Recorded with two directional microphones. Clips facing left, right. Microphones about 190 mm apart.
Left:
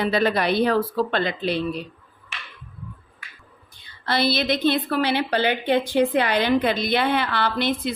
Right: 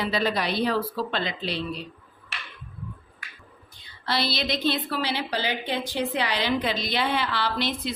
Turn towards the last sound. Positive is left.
turn(degrees=55)  # may be behind; listen again after turning